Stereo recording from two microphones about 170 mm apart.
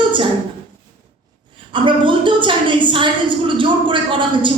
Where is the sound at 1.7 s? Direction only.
30° right (ahead or behind).